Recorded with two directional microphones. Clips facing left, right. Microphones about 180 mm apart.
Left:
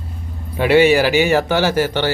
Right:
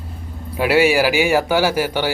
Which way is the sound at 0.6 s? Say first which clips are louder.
Left 3 dB; 5° right (ahead or behind).